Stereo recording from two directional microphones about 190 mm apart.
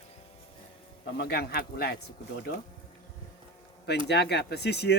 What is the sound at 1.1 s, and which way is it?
Speech, 55° left (ahead or behind).